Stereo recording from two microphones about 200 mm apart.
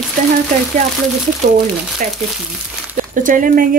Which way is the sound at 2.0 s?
40° right (ahead or behind).